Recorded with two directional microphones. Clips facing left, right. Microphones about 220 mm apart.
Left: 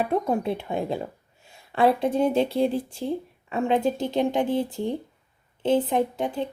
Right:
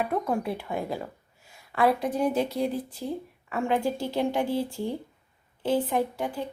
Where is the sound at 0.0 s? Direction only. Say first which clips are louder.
Left 3 dB; 25° left (ahead or behind).